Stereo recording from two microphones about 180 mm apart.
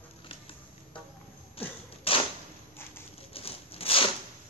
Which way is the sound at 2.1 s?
30° left (ahead or behind).